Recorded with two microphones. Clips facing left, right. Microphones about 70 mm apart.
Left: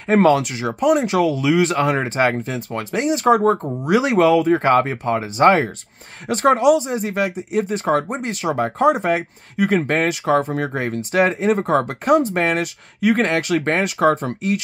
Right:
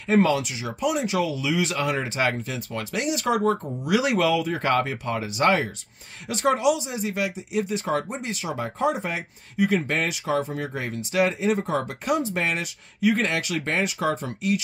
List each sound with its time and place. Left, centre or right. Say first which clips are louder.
0.1 s speech: left 6 dB; left